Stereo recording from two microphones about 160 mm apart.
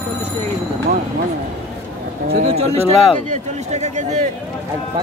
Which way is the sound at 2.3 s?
40° right (ahead or behind).